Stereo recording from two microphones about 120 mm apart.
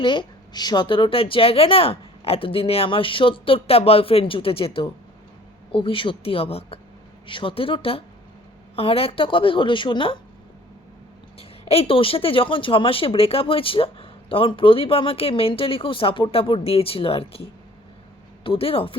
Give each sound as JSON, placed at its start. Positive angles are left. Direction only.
{"t": 0.0, "sound": "speech", "side_deg": 45}
{"t": 11.3, "sound": "speech", "side_deg": 55}
{"t": 18.4, "sound": "speech", "side_deg": 50}